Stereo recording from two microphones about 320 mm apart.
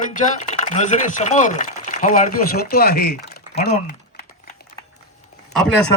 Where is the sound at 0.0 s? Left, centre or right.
Left.